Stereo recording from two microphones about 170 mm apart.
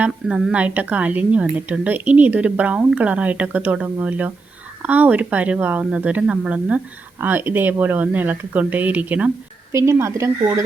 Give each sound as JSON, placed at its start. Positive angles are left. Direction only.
{"t": 0.0, "sound": "speech", "side_deg": -5}